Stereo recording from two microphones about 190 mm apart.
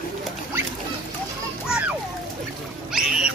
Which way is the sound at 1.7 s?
10° right (ahead or behind).